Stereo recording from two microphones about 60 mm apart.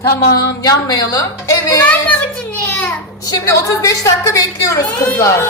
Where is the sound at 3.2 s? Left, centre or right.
Left.